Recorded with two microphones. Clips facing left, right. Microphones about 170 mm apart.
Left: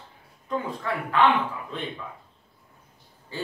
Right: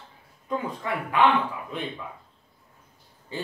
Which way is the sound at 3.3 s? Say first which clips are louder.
Even; 20° right (ahead or behind).